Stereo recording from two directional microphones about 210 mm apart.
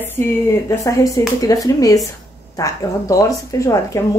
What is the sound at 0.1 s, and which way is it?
A woman's voice, 10° left (ahead or behind).